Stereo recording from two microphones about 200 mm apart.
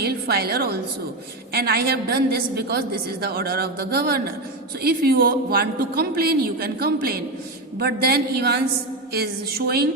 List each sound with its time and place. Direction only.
0.0 s a woman's voice: 50° right (ahead or behind)